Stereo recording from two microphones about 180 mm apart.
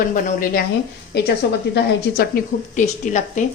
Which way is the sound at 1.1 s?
65° left (ahead or behind).